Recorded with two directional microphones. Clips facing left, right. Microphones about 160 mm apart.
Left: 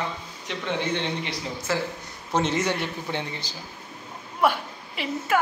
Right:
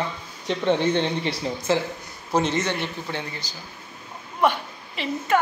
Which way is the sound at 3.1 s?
25° left (ahead or behind).